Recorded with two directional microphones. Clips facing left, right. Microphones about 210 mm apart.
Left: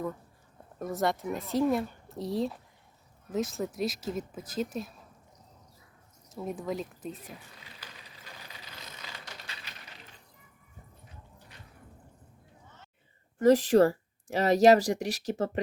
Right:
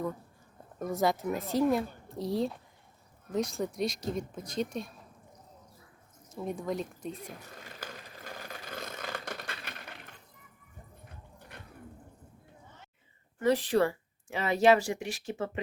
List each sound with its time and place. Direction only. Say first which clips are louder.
0.8 s speech: right 1 dB; centre (ahead or behind)
6.2 s speech: even; centre (ahead or behind)
7.3 s mechanisms: right 6 dB; 45° right (ahead or behind)
11.0 s dog: right 2 dB; 55° right (ahead or behind)
13.4 s speech: left 5 dB; 45° left (ahead or behind)